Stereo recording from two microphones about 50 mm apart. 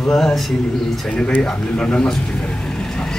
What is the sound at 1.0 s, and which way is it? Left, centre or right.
Speech, centre.